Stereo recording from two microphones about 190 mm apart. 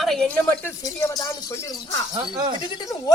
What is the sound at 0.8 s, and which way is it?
Speech, 15° left (ahead or behind).